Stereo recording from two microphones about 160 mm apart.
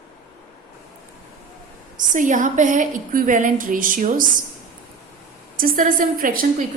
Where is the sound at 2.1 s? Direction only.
55° right (ahead or behind).